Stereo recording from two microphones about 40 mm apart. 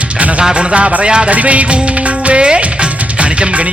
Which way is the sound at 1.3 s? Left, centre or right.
Right.